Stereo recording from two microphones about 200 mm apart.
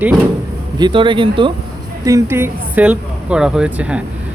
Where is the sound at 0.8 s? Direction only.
25° right (ahead or behind).